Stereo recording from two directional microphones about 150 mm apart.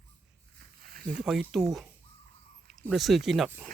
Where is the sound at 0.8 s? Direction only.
85° right.